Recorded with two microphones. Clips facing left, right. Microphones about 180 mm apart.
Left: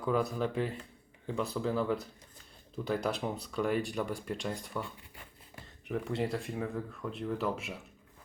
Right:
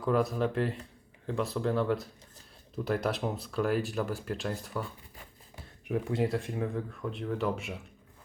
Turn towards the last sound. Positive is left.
turn(degrees=0)  # may be behind; listen again after turning